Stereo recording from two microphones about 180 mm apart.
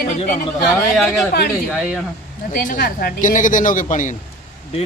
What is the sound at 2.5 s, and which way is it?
A man's voice, 50° left (ahead or behind).